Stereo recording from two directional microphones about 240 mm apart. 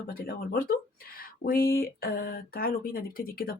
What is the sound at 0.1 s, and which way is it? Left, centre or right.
Speech, left.